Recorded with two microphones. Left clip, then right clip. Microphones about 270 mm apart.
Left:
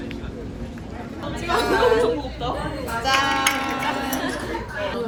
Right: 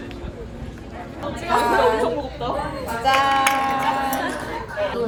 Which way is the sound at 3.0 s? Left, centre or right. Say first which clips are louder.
Right 3 dB; right.